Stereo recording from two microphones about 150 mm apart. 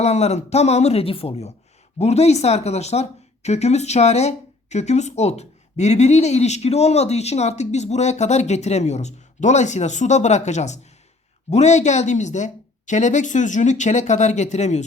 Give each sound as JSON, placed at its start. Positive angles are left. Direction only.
{"t": 0.0, "sound": "speech", "side_deg": 45}